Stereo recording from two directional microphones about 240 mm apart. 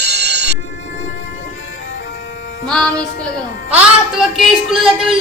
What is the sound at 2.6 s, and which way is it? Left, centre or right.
A child's voice, centre.